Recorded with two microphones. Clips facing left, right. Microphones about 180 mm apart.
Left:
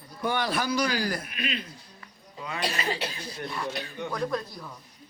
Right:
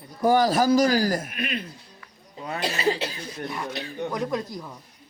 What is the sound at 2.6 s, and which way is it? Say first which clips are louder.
Speech: right 5 dB; 25° right (ahead or behind).